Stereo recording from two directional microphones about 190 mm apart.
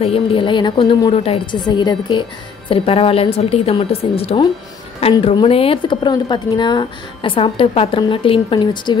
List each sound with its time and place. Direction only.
0.0 s speech: 30° left (ahead or behind)